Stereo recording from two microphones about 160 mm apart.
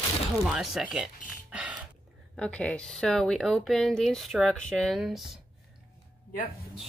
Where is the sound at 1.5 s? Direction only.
5° right (ahead or behind).